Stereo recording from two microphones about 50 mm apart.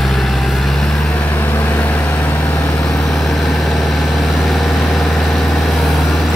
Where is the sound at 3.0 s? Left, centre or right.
Centre.